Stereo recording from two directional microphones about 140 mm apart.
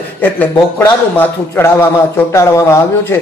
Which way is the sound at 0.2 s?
15° left (ahead or behind).